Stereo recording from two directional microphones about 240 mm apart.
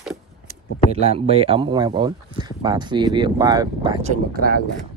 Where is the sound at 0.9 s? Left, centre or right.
Right.